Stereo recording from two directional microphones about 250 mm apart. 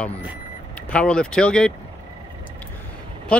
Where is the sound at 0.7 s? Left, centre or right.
Centre.